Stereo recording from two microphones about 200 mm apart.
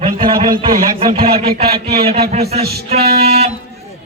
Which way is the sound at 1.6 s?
50° right (ahead or behind).